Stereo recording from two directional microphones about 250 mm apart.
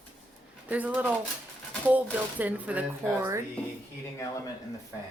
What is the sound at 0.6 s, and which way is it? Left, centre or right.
Speech, centre.